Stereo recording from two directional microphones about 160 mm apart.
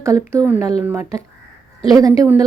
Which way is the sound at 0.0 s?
20° right (ahead or behind).